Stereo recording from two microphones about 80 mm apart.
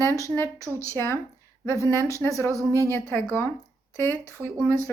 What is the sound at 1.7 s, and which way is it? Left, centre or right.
Speech, right.